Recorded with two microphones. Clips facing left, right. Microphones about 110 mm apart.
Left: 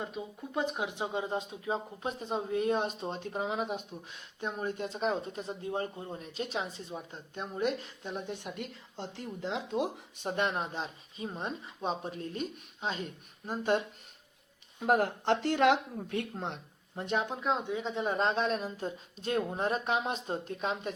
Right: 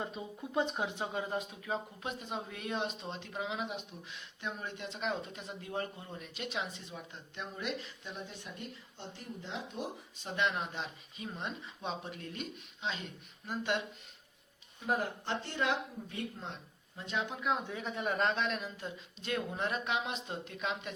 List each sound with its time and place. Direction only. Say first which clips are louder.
0.0 s speech: left 1 dB; 5° left (ahead or behind)
0.9 s speech: left 3 dB; 15° left (ahead or behind); by 10.2 s 90° left
10.2 s speech: left 3 dB; 45° left (ahead or behind)
14.8 s speech: left 7 dB; 65° left (ahead or behind); by 17.3 s 50° left (ahead or behind)
17.7 s speech: left 4 dB; 20° left (ahead or behind); by 20.9 s 35° left (ahead or behind)